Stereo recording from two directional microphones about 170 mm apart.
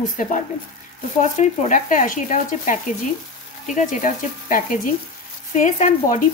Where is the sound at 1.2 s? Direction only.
45° left (ahead or behind).